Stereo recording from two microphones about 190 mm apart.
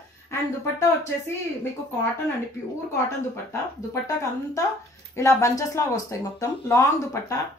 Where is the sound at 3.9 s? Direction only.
15° left (ahead or behind).